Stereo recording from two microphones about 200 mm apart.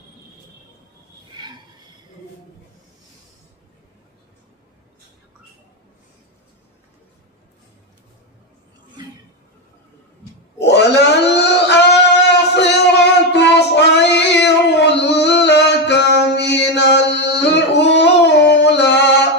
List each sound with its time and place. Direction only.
1.3 s a sound: 20° right (ahead or behind)
10.6 s wail: 60° left (ahead or behind)
12.3 s child singing: 60° left (ahead or behind)